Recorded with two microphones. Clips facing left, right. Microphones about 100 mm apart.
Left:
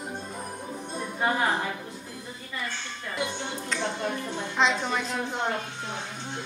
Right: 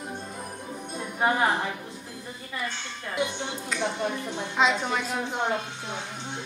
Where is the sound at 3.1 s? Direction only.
15° right (ahead or behind).